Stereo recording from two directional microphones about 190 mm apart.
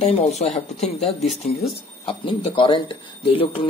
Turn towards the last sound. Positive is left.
turn(degrees=30)  # may be behind; listen again after turning